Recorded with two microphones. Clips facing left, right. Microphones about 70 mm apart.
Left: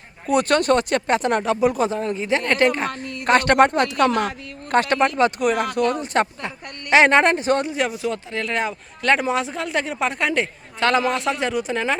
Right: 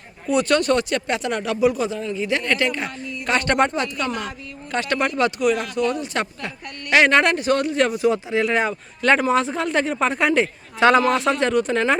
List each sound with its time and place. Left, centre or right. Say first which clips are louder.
0.3 s speech: left 1 dB; left
2.4 s speech: left 3 dB; left
3.8 s speech: left 7 dB; left
4.9 s speech: right 1 dB; left
5.4 s speech: left 1 dB; left
7.7 s speech: right 4 dB; centre
7.9 s a woman's voice: right 6 dB; centre